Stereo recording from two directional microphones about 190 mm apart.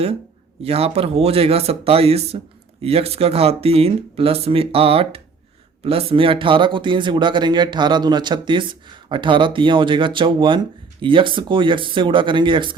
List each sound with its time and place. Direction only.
0.6 s speech: 30° right (ahead or behind)